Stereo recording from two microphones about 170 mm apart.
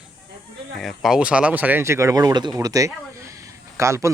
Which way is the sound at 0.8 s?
Centre (ahead or behind).